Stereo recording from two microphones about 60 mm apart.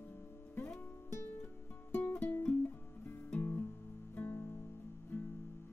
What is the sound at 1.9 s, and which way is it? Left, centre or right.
Music, left.